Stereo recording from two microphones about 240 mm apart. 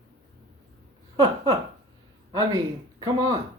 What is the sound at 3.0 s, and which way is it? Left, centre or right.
Speech, centre.